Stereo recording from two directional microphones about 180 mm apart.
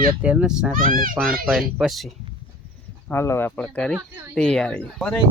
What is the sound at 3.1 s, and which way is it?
Speech, 15° left (ahead or behind).